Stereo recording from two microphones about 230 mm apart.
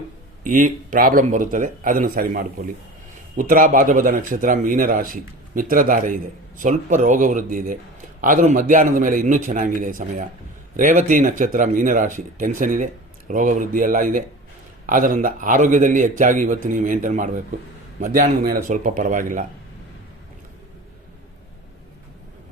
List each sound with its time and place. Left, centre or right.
0.4 s speech: right